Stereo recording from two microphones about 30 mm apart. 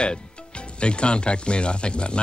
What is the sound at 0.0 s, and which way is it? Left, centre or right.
Speech, left.